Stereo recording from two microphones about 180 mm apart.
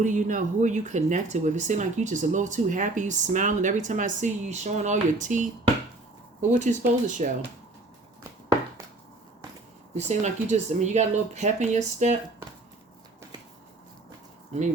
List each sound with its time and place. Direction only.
0.0 s speech: 45° right (ahead or behind)
9.9 s speech: 40° right (ahead or behind)